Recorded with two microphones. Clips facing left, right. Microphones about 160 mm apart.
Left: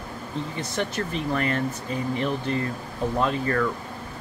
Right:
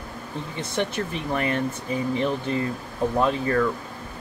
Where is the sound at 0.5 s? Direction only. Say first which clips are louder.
Right 3 dB; 20° right (ahead or behind).